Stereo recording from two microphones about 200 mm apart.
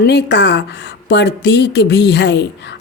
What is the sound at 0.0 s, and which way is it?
A woman's voice, 55° left (ahead or behind).